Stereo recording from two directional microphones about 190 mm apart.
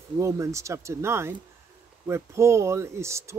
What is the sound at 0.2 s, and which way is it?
Speech, 15° right (ahead or behind).